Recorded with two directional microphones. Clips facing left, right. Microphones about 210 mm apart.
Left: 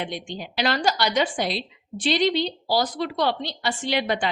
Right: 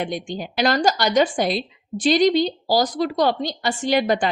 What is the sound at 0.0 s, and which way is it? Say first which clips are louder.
Speech: right 5 dB; 45° right (ahead or behind).